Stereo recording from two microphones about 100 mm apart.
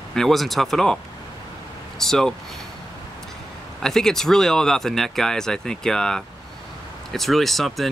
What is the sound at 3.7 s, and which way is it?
Speech, 5° left (ahead or behind).